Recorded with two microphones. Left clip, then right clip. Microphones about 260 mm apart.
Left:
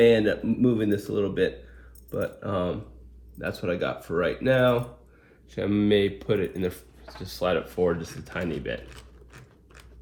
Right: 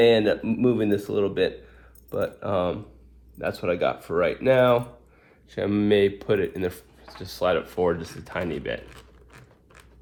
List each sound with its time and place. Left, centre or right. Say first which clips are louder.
0.2 s speech: right 2 dB; right